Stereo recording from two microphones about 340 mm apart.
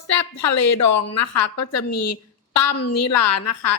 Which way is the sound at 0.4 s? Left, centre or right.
Left.